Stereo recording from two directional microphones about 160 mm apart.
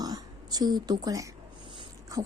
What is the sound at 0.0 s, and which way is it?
Throat clearing, 25° right (ahead or behind).